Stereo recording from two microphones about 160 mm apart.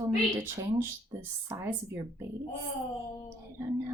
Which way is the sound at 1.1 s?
20° right (ahead or behind).